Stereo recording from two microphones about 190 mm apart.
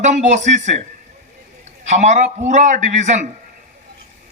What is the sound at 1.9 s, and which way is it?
A man's voice, 40° right (ahead or behind).